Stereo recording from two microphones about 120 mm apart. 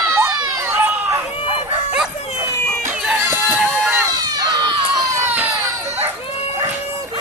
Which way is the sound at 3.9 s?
30° right (ahead or behind).